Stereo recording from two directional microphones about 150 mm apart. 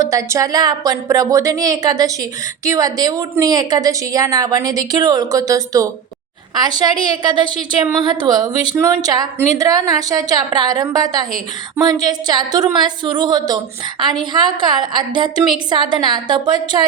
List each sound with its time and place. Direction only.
0.0 s a woman's voice: 20° right (ahead or behind)